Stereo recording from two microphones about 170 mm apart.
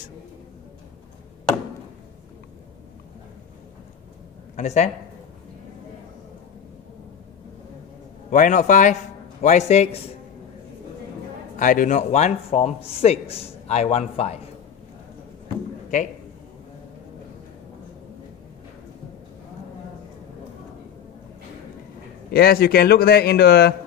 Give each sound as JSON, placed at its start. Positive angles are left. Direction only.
{"t": 4.6, "sound": "a man's voice", "side_deg": 45}
{"t": 8.3, "sound": "a man's voice", "side_deg": 50}
{"t": 11.5, "sound": "a man's voice", "side_deg": 50}
{"t": 22.3, "sound": "speech", "side_deg": 65}